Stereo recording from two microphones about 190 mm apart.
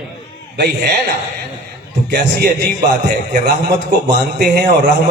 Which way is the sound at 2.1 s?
55° right (ahead or behind).